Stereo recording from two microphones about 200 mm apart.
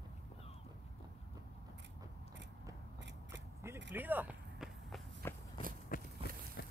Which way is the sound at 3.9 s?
10° right (ahead or behind).